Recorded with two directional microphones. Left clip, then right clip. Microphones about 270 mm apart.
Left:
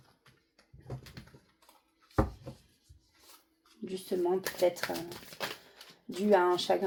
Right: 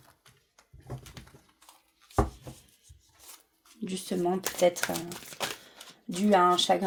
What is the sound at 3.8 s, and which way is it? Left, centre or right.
Speech, right.